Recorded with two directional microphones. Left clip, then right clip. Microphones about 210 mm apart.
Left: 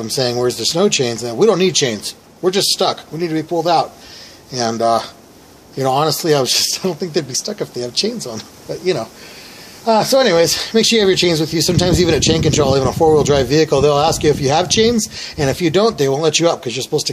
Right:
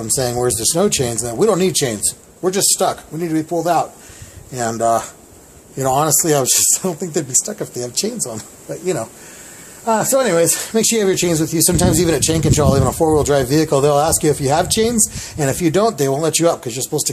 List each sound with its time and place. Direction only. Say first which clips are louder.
0.0 s speech: left 2 dB; 10° right (ahead or behind)